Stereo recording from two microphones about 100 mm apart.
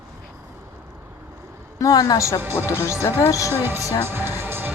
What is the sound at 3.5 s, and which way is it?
Speech, 25° right (ahead or behind).